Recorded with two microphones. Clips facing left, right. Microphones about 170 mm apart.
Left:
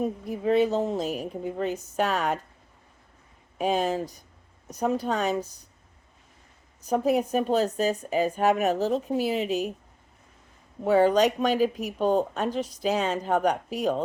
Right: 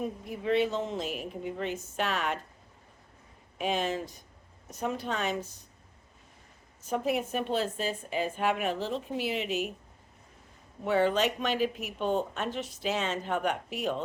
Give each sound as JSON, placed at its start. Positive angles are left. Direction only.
{"t": 0.0, "sound": "speech", "side_deg": 40}
{"t": 3.6, "sound": "speech", "side_deg": 40}
{"t": 6.9, "sound": "speech", "side_deg": 40}
{"t": 10.8, "sound": "speech", "side_deg": 40}